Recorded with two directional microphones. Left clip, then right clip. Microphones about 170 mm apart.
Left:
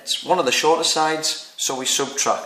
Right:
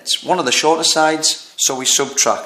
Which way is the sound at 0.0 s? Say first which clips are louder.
Right 2 dB; 40° right (ahead or behind).